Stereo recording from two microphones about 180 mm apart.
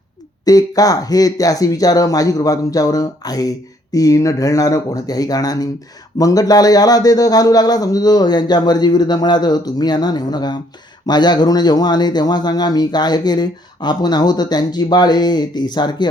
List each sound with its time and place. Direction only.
0.4 s speech: 20° left (ahead or behind)